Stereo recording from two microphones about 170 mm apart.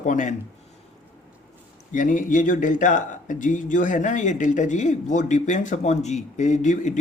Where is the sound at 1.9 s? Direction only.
50° left (ahead or behind).